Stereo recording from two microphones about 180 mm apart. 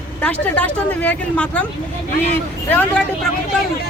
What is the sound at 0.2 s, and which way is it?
Speech, 5° left (ahead or behind).